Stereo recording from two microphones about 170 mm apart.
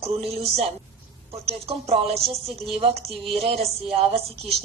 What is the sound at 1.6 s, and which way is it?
Speech, 35° right (ahead or behind).